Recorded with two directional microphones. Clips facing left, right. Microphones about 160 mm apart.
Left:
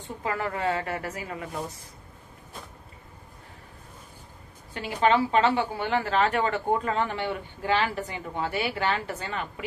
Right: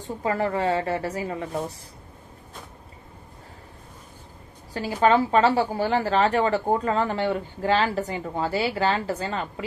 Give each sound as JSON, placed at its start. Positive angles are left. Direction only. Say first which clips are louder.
{"t": 0.0, "sound": "a woman's voice", "louder": "right 5 dB", "side_deg": -35}
{"t": 4.7, "sound": "a woman's voice", "louder": "right 3 dB", "side_deg": -40}